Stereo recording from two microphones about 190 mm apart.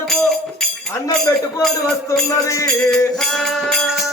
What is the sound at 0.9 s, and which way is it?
Speech, 20° left (ahead or behind).